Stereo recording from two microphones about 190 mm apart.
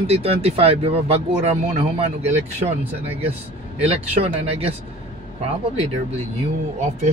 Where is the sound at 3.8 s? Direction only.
35° right (ahead or behind).